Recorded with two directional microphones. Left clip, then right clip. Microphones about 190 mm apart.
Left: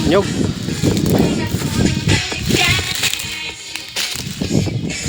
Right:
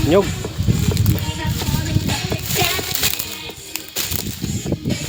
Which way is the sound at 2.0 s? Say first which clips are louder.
Left 5 dB; 45° right (ahead or behind).